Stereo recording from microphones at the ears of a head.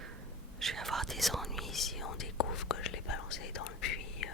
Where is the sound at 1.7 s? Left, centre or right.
Left.